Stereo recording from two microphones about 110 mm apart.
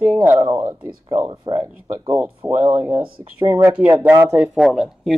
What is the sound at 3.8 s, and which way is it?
Speech, 15° right (ahead or behind).